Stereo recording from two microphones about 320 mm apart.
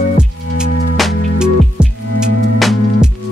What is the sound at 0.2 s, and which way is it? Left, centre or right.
Music, centre.